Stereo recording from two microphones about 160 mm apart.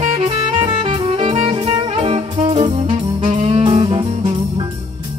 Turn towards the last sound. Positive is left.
turn(degrees=-30)  # may be behind; listen again after turning